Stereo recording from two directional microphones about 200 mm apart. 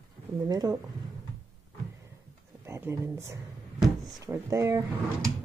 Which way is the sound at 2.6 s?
15° right (ahead or behind).